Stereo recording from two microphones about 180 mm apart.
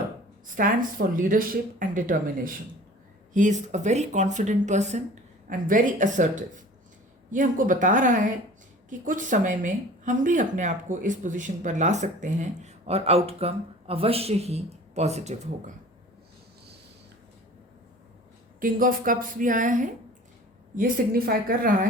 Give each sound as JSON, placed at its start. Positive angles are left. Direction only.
{"t": 0.4, "sound": "speech", "side_deg": -50}
{"t": 18.6, "sound": "speech", "side_deg": -50}